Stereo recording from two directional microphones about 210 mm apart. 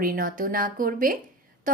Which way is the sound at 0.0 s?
40° right (ahead or behind).